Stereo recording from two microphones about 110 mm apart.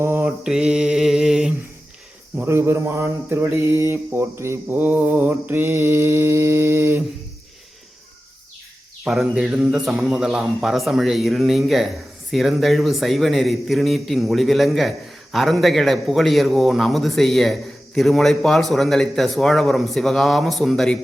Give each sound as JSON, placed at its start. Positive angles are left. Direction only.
{"t": 0.0, "sound": "mantra", "side_deg": -20}
{"t": 0.4, "sound": "mantra", "side_deg": -5}
{"t": 2.4, "sound": "mantra", "side_deg": -20}
{"t": 9.0, "sound": "speech", "side_deg": -5}